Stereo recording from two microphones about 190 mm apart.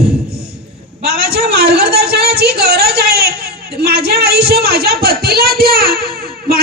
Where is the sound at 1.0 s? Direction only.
55° right (ahead or behind).